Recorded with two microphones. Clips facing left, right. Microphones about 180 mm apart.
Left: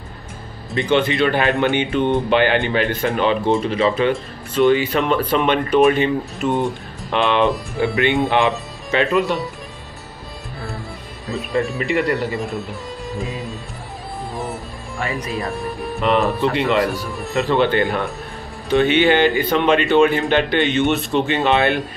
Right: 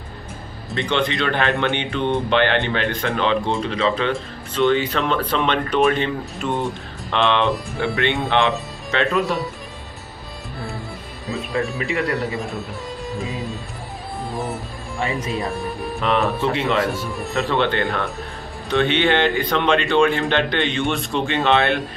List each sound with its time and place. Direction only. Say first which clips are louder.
0.7 s speech: left 4 dB; 5° left (ahead or behind)
11.2 s speech: left 2 dB; centre (ahead or behind)
14.3 s music: right 1 dB; centre (ahead or behind)
15.0 s speech: right 1 dB; 20° right (ahead or behind)
15.3 s speech: even; centre (ahead or behind)
16.8 s speech: left 2 dB; 25° right (ahead or behind)
17.1 s speech: left 3 dB; centre (ahead or behind)